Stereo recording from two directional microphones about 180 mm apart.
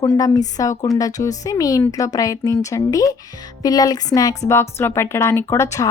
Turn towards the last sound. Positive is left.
turn(degrees=15)  # may be behind; listen again after turning